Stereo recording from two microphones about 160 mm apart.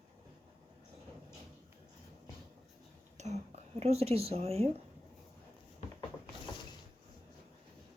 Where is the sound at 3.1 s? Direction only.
45° right (ahead or behind).